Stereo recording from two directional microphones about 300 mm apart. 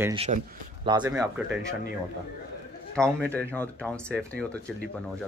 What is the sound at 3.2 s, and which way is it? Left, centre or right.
A man's voice, centre.